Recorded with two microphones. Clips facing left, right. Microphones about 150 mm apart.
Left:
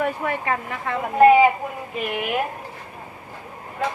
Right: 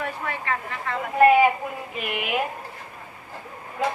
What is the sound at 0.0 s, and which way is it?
Speech, 50° left (ahead or behind).